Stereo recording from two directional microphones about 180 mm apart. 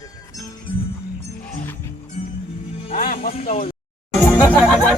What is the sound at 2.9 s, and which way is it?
Music, 50° left (ahead or behind).